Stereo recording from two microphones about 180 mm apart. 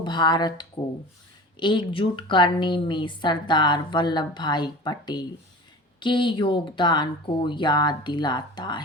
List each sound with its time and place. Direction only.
0.0 s a woman's voice: 25° left (ahead or behind)